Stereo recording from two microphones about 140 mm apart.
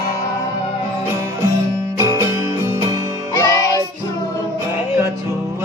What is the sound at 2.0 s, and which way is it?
Music, 25° right (ahead or behind).